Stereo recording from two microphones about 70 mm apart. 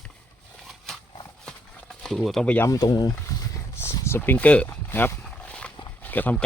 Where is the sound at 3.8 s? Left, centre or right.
Left.